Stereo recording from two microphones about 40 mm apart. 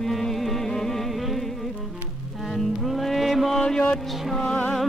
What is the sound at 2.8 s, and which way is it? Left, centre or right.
Music, centre.